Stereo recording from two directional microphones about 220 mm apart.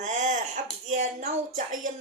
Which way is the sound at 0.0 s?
35° right (ahead or behind).